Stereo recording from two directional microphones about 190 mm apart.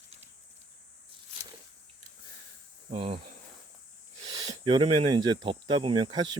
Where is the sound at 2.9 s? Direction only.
30° right (ahead or behind).